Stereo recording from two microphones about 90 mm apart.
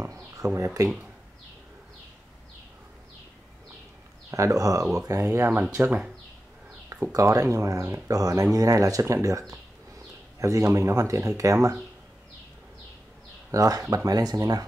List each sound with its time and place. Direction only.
0.4 s speech: 40° right (ahead or behind)
4.3 s speech: 35° right (ahead or behind)
5.9 s speech: 10° right (ahead or behind)
7.1 s speech: 40° right (ahead or behind)
10.4 s speech: 35° right (ahead or behind)
13.5 s speech: 40° right (ahead or behind)